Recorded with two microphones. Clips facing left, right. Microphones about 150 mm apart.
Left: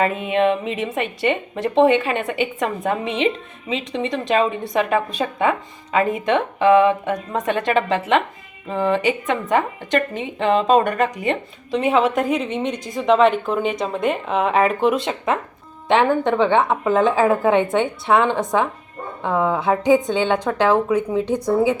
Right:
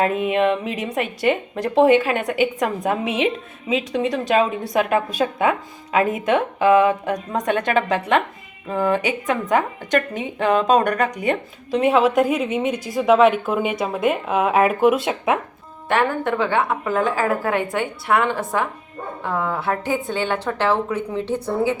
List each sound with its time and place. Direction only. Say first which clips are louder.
0.0 s a woman's voice: even; centre (ahead or behind)
15.9 s a woman's voice: left 3 dB; 20° left (ahead or behind)